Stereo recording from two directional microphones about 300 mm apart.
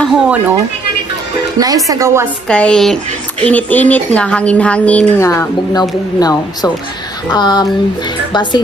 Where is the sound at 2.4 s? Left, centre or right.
Centre.